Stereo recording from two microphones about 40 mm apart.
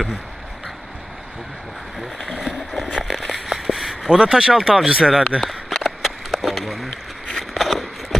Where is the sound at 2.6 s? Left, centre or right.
Centre.